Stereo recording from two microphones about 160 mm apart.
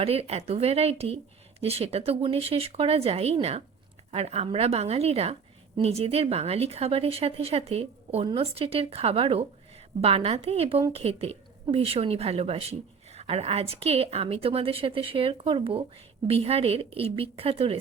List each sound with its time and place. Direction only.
0.0 s a woman's voice: 40° right (ahead or behind)